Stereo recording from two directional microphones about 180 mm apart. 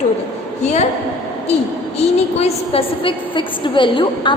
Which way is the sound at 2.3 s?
35° left (ahead or behind).